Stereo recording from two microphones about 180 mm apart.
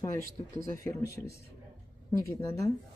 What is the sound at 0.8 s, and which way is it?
Speech, 15° left (ahead or behind).